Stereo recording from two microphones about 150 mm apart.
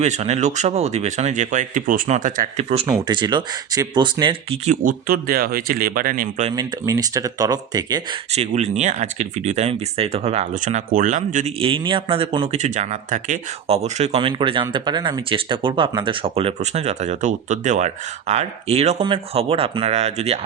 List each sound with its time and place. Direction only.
0.0 s speech: 50° right (ahead or behind)
2.8 s speech: 30° right (ahead or behind)
4.6 s speech: 60° right (ahead or behind)
6.6 s speech: 25° right (ahead or behind)
8.3 s speech: 45° right (ahead or behind)
11.6 s speech: 35° right (ahead or behind)